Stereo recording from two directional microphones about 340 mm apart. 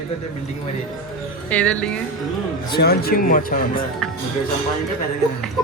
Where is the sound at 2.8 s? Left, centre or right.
Left.